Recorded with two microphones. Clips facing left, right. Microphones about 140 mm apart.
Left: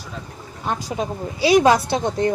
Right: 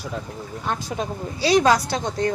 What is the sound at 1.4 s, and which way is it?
Speech, 15° left (ahead or behind).